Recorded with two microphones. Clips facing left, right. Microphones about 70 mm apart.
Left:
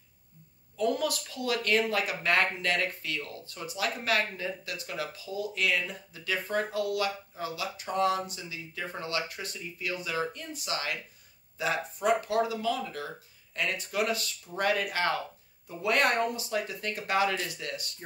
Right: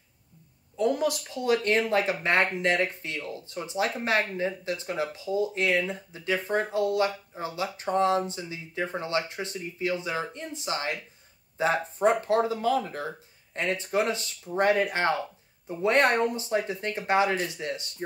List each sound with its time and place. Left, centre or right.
0.7 s speech: right